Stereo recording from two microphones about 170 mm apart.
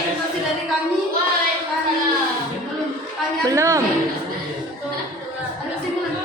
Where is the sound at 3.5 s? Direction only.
15° right (ahead or behind).